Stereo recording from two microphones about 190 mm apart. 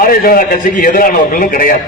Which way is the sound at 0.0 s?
50° left (ahead or behind).